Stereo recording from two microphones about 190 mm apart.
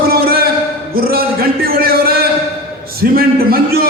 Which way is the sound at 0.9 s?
50° right (ahead or behind).